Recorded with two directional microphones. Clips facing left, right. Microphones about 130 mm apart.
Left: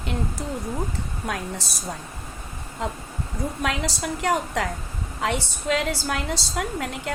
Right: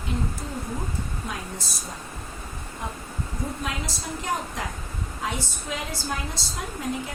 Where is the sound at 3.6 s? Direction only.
80° left.